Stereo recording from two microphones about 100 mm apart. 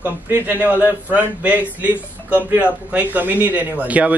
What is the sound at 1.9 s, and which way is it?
Speech, 20° left (ahead or behind).